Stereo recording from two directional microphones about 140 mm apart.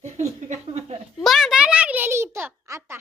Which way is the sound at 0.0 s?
55° right (ahead or behind).